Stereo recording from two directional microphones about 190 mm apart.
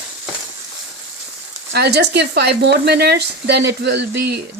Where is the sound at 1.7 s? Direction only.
60° right (ahead or behind).